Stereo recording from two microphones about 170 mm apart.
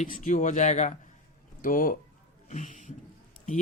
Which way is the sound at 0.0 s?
50° left (ahead or behind).